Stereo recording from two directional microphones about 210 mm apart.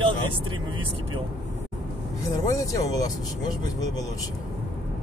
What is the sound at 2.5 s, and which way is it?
Speech, 15° left (ahead or behind).